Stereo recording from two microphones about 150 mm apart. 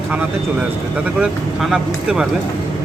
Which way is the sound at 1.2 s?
5° right (ahead or behind).